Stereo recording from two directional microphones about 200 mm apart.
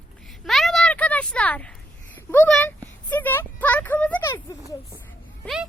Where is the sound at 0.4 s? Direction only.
Centre (ahead or behind).